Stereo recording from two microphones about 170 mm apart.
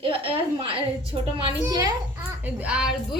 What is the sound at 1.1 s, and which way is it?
Speech, 30° right (ahead or behind).